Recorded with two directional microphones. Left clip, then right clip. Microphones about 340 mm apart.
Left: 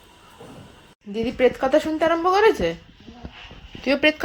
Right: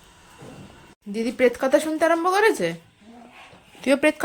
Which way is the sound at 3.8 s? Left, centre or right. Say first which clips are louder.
Even; centre.